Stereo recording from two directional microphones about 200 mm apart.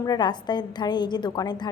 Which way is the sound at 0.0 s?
20° left (ahead or behind).